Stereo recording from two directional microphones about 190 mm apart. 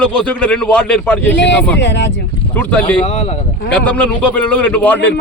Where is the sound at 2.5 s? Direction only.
10° left (ahead or behind).